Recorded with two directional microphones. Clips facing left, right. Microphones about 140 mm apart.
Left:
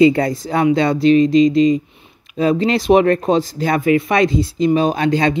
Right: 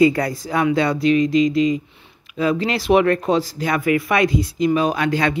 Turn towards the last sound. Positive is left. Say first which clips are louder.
# left 3 dB
turn(degrees=25)  # may be behind; listen again after turning